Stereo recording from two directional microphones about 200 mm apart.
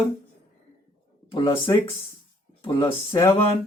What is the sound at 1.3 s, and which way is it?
Speech, 25° left (ahead or behind).